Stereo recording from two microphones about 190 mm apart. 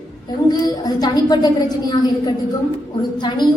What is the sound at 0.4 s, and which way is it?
A woman's voice, 20° left (ahead or behind).